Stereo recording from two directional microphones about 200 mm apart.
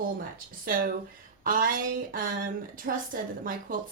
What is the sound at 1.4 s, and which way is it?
A woman's voice, 45° right (ahead or behind).